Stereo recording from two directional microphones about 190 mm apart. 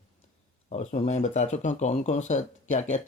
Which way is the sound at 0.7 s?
40° left (ahead or behind).